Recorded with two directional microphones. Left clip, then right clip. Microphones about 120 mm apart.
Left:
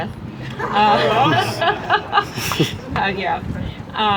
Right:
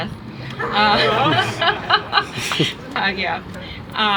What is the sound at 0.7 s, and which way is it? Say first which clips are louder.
Speech: left 1 dB; 15° right (ahead or behind).